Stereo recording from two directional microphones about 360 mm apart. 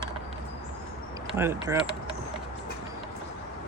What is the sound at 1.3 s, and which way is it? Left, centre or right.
Speech, centre.